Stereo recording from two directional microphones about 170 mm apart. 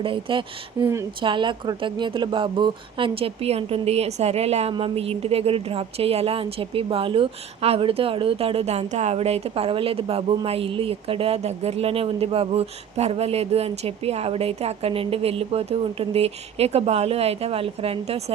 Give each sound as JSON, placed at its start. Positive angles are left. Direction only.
{"t": 0.0, "sound": "speech", "side_deg": -30}